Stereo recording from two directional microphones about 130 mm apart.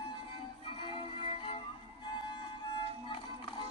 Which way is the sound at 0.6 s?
40° left (ahead or behind).